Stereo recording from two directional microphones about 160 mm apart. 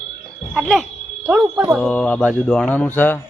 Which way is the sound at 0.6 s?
Centre (ahead or behind).